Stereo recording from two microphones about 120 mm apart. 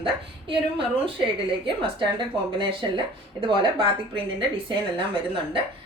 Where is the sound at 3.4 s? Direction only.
45° right (ahead or behind).